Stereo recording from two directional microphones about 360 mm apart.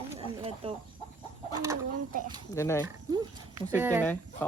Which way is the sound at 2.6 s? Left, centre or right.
Centre.